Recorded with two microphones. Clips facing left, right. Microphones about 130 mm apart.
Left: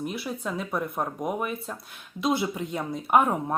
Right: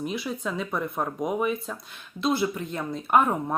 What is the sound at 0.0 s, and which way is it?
Speech, 5° left (ahead or behind).